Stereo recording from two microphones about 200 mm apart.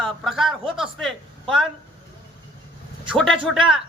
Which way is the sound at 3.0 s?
Centre (ahead or behind).